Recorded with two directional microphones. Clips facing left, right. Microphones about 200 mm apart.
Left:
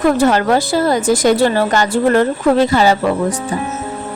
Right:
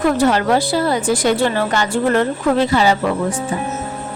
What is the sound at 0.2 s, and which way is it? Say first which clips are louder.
A woman's voice: left 2 dB; 45° left (ahead or behind).